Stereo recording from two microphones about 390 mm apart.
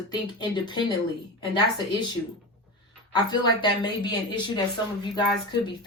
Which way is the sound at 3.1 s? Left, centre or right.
Centre.